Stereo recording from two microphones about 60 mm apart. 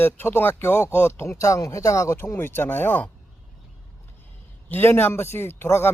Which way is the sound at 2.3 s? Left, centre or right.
Left.